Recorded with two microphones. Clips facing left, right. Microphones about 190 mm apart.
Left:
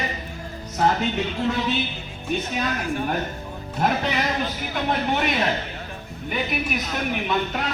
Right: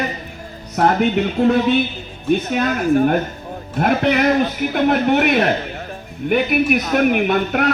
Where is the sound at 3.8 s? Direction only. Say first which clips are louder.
Right 7 dB; 60° right (ahead or behind).